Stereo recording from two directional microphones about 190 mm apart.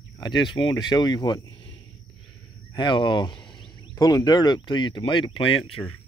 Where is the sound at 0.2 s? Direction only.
25° left (ahead or behind).